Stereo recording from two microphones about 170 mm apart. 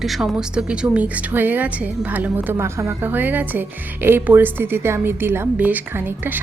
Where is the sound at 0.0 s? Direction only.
Centre (ahead or behind).